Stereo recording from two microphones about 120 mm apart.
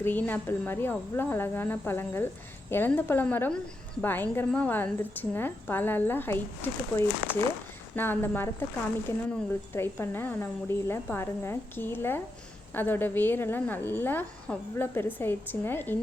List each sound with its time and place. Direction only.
0.0 s a woman's voice: 15° left (ahead or behind)